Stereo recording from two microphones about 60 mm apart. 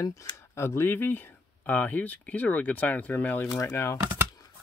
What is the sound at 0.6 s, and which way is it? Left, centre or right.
Speech, left.